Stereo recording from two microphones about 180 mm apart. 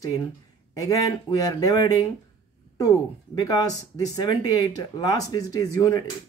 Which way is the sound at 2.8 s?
20° left (ahead or behind).